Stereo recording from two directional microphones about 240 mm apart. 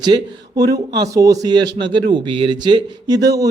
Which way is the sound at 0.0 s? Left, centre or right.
Centre.